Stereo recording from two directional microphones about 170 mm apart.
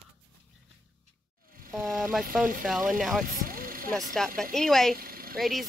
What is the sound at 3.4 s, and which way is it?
Vehicle, 55° right (ahead or behind).